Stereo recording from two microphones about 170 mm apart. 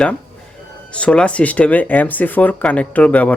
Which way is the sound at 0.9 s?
5° left (ahead or behind).